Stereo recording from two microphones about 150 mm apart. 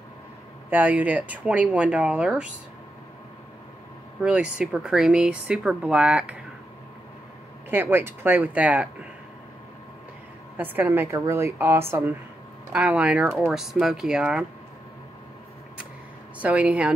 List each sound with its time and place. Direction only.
0.7 s speech: 10° right (ahead or behind)
4.2 s speech: 5° right (ahead or behind)
7.7 s speech: 15° right (ahead or behind)
10.6 s speech: 15° right (ahead or behind)
16.3 s speech: 10° right (ahead or behind)